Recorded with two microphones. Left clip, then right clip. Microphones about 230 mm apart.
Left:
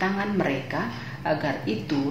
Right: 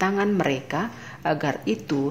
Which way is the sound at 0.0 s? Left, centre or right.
Right.